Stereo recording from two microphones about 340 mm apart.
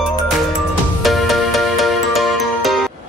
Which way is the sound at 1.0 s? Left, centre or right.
Centre.